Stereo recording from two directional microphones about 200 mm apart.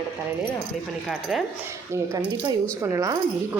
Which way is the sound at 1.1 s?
Centre (ahead or behind).